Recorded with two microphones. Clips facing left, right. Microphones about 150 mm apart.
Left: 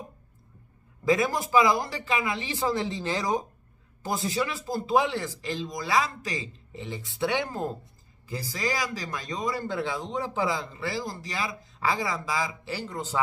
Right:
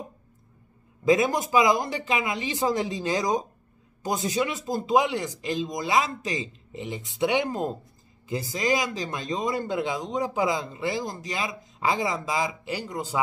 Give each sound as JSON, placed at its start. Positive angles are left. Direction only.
{"t": 1.0, "sound": "speech", "side_deg": -20}